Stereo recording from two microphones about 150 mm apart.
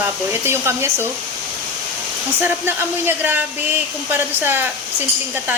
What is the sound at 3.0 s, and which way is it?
Speech, 10° right (ahead or behind).